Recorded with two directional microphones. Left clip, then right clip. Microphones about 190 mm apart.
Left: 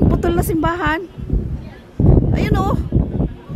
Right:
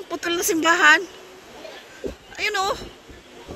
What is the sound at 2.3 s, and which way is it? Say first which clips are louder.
Speech: left 3 dB; 20° left (ahead or behind).